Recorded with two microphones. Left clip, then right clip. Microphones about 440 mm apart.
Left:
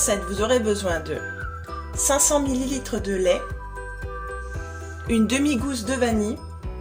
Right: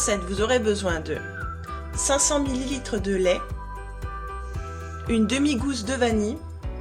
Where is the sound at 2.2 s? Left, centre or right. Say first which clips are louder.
Left 3 dB; right.